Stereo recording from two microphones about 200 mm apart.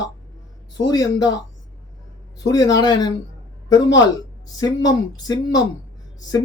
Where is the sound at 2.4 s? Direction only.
20° left (ahead or behind).